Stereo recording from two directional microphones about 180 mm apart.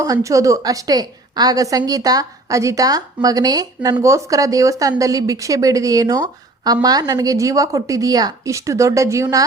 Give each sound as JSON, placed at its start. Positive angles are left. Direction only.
{"t": 0.0, "sound": "a woman's voice", "side_deg": -20}